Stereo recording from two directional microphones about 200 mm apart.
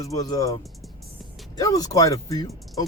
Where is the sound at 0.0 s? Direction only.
15° left (ahead or behind).